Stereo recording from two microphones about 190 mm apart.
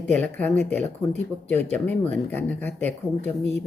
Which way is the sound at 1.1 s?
35° right (ahead or behind).